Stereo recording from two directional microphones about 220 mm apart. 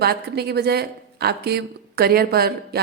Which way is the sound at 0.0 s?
45° right (ahead or behind).